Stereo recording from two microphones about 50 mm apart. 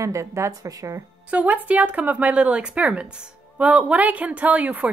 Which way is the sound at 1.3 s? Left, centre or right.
Right.